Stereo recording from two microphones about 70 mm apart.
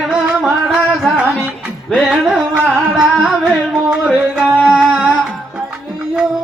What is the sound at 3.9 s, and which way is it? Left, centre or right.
Music, centre.